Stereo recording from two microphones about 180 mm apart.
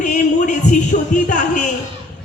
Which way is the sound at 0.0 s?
45° left (ahead or behind).